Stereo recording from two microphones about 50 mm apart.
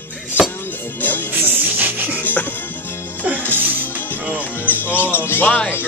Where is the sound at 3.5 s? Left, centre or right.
Right.